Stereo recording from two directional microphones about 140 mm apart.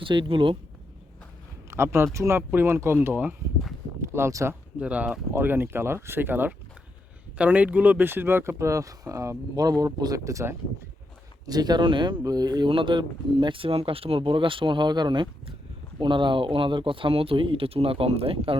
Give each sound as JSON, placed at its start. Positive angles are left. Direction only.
{"t": 0.0, "sound": "speech", "side_deg": -35}
{"t": 1.7, "sound": "speech", "side_deg": -20}
{"t": 4.8, "sound": "speech", "side_deg": -10}